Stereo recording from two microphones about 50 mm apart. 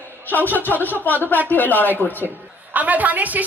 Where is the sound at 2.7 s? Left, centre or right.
Right.